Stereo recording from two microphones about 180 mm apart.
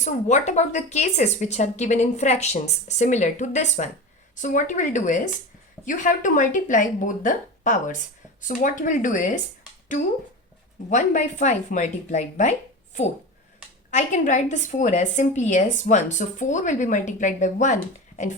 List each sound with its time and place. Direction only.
0.0 s speech: 40° left (ahead or behind)
10.8 s speech: 45° left (ahead or behind)